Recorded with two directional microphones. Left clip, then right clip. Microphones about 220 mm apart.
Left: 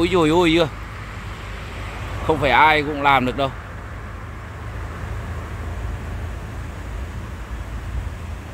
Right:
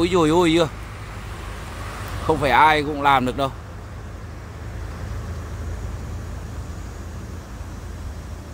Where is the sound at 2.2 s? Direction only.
Centre (ahead or behind).